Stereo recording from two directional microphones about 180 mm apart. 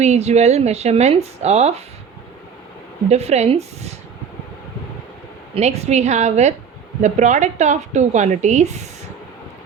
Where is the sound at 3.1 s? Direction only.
35° right (ahead or behind).